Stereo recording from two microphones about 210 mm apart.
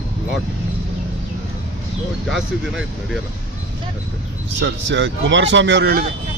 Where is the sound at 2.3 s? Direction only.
Centre (ahead or behind).